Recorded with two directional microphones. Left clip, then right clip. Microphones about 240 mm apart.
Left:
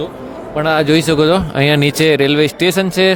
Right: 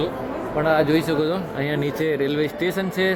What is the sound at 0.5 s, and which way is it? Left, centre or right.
Speech, left.